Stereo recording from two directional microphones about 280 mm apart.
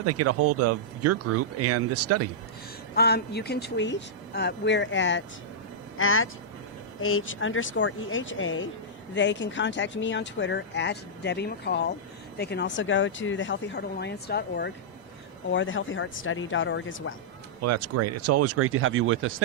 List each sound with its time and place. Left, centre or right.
0.0 s speech: right
2.9 s speech: left
17.6 s speech: right